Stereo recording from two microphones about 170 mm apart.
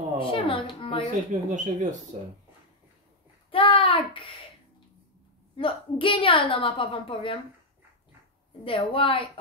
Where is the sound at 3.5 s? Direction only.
30° left (ahead or behind).